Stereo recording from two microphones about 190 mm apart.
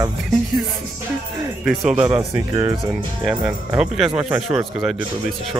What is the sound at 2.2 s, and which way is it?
Speech, 20° right (ahead or behind).